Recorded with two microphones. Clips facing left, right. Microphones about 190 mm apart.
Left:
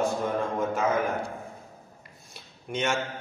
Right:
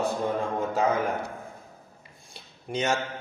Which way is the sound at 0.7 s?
35° right (ahead or behind).